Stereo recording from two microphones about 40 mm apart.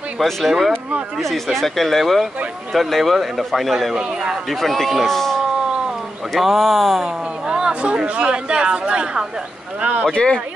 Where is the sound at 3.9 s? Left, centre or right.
Centre.